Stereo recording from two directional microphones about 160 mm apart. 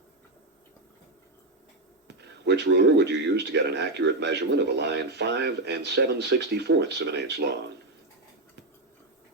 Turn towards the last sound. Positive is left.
turn(degrees=-90)